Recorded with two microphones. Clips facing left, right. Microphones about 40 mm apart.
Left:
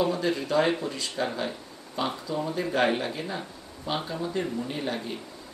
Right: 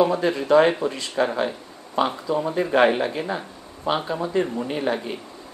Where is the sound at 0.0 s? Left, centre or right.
Right.